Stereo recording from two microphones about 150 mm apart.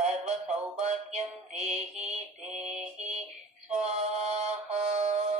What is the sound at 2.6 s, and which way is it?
Mantra, 5° right (ahead or behind).